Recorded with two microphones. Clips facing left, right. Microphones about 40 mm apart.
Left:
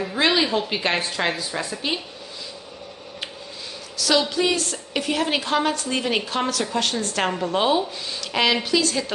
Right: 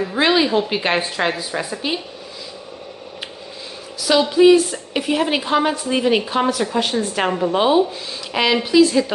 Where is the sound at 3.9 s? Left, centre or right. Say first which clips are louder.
Right 6 dB; centre.